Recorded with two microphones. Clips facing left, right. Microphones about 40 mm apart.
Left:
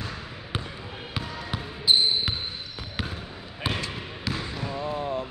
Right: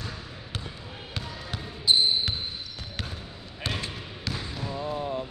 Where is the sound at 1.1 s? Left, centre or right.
Centre.